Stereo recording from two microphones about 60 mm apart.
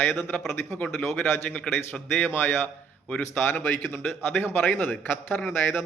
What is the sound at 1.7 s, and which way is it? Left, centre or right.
A man's voice, left.